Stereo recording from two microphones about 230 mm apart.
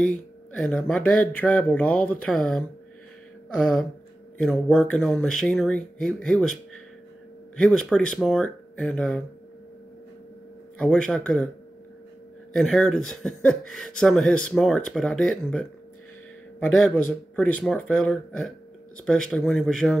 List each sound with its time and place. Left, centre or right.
0.5 s speech: centre
1.0 s a sound: left
1.4 s speech: centre
10.8 s speech: centre
12.5 s speech: centre